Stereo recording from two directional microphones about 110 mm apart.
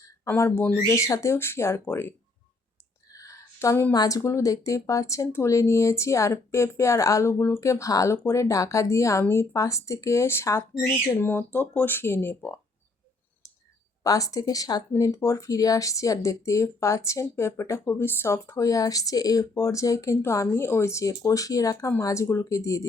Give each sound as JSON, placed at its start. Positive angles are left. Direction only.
{"t": 0.3, "sound": "speech", "side_deg": 20}
{"t": 3.1, "sound": "a sound", "side_deg": 30}
{"t": 3.9, "sound": "speech", "side_deg": 35}
{"t": 14.0, "sound": "speech", "side_deg": 30}